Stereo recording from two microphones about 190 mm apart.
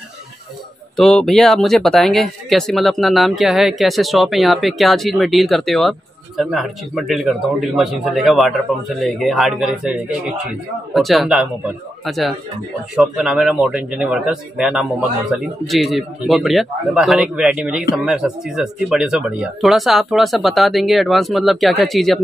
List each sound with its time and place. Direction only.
0.9 s speech: centre (ahead or behind)